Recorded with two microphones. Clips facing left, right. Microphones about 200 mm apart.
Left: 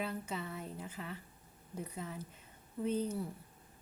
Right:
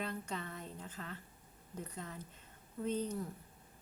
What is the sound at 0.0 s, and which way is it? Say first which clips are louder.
A woman's voice: left 2 dB; 5° left (ahead or behind).